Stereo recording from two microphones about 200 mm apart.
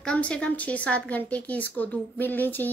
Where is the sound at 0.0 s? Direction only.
5° left (ahead or behind).